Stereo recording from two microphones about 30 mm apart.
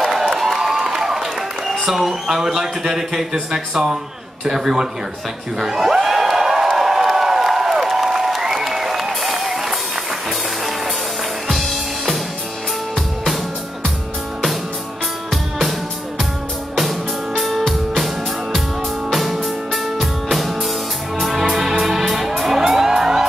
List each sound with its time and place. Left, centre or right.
0.0 s a sound: centre
0.7 s a man's voice: centre
5.6 s crowd: centre
6.8 s applause: centre
11.4 s music: centre
17.4 s music: centre